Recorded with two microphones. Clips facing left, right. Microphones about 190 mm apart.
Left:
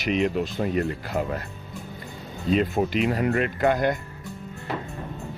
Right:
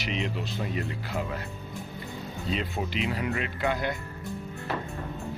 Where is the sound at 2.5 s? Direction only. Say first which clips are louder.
Left 9 dB; 50° left (ahead or behind).